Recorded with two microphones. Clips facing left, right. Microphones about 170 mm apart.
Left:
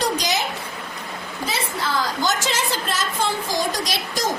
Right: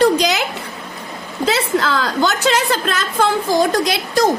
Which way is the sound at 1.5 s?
85° right.